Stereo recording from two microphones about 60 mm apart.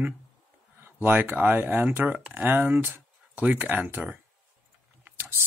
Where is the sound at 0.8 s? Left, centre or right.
Right.